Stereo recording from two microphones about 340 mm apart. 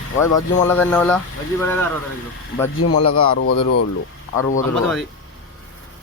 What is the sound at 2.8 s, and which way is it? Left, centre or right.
Speech, left.